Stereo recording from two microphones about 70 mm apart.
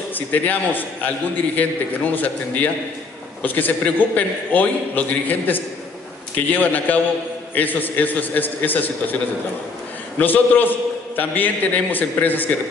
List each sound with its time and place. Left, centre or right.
0.1 s a man's voice: left
10.1 s a man's voice: left